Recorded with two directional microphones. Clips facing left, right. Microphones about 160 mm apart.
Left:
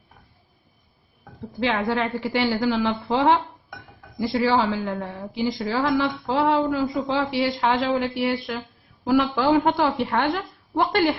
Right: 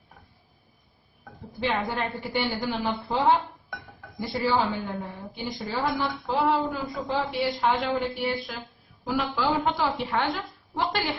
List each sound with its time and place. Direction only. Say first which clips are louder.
1.5 s a woman's voice: left 5 dB; 90° left; by 11.1 s 55° left (ahead or behind)